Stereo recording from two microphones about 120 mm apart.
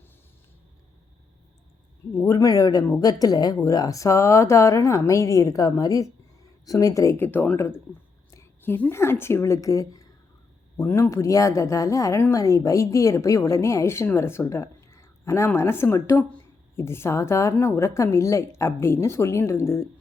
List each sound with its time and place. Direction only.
2.2 s a woman's voice: 30° left (ahead or behind)
10.8 s a woman's voice: 15° left (ahead or behind)